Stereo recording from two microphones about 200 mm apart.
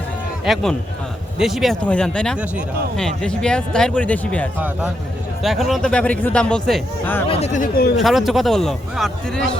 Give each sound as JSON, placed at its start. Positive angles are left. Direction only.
{"t": 0.4, "sound": "speech", "side_deg": 0}
{"t": 7.3, "sound": "speech", "side_deg": 30}
{"t": 8.0, "sound": "speech", "side_deg": 0}